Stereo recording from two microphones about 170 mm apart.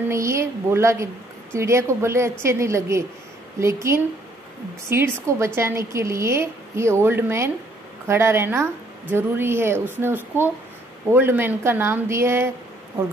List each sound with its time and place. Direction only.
0.1 s a woman's voice: 15° right (ahead or behind)